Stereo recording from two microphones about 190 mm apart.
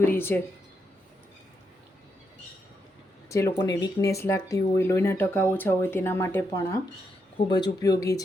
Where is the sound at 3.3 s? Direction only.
15° left (ahead or behind).